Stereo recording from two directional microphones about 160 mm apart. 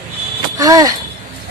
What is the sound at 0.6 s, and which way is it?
Speech, 20° right (ahead or behind).